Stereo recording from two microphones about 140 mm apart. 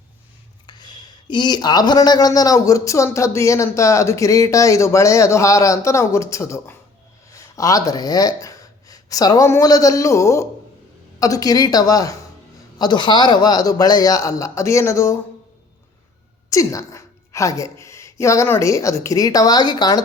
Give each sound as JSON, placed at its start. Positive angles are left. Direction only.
{"t": 0.7, "sound": "speech", "side_deg": 30}
{"t": 16.5, "sound": "a woman's voice", "side_deg": 25}